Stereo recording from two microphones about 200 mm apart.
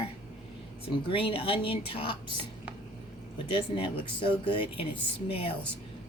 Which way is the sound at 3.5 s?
25° left (ahead or behind).